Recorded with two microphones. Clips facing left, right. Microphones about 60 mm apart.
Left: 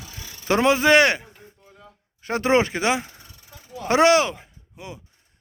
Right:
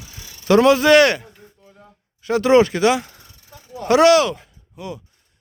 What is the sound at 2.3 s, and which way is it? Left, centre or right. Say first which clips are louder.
Speech: right 6 dB; left.